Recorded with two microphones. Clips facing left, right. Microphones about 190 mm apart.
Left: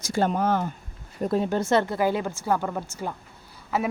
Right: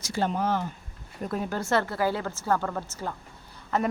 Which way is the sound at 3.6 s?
5° left (ahead or behind).